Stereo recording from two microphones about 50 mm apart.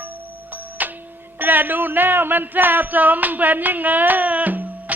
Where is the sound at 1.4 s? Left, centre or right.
Right.